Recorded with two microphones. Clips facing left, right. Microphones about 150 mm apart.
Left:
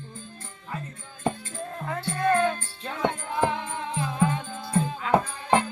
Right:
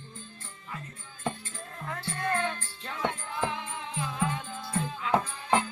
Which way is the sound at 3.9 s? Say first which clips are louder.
Left 5 dB; 35° left (ahead or behind).